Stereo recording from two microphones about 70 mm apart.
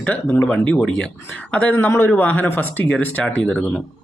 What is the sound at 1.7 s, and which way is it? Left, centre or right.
Speech, left.